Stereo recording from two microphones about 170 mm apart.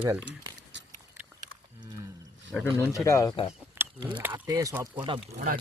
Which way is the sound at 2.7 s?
15° left (ahead or behind).